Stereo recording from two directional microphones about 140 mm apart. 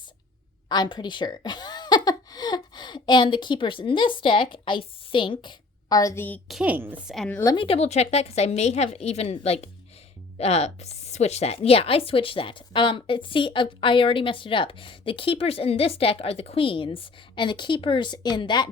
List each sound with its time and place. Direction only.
0.7 s a woman's voice: 30° left (ahead or behind); by 6.4 s 15° left (ahead or behind)
6.5 s a woman's voice: 10° right (ahead or behind)
7.3 s speech: 15° left (ahead or behind)
7.5 s a woman's voice: 40° left (ahead or behind)